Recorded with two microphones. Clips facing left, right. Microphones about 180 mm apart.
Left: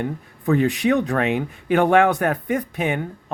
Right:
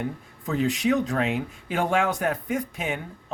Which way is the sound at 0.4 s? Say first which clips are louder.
Left 5 dB; 60° left (ahead or behind).